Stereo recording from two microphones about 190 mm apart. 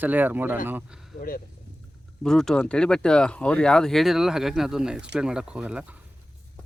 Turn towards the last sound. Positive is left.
turn(degrees=-5)  # may be behind; listen again after turning